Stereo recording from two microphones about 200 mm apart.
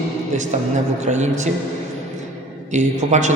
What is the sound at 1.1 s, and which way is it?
Speech, 35° right (ahead or behind).